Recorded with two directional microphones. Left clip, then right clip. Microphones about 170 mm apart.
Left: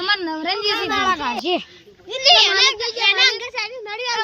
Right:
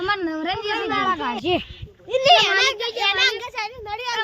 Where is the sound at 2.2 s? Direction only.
75° right (ahead or behind).